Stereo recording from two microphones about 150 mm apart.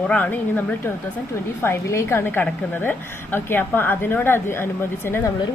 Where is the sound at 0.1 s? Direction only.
10° left (ahead or behind).